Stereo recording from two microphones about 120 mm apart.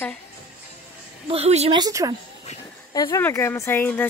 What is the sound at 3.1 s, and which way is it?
Speech, 25° left (ahead or behind).